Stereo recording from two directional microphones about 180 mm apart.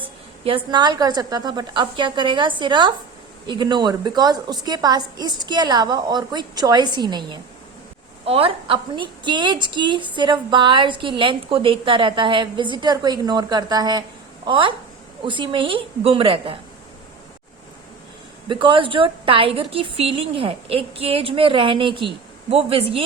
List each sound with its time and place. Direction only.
0.4 s a woman's voice: 25° right (ahead or behind)
18.4 s a woman's voice: 25° right (ahead or behind)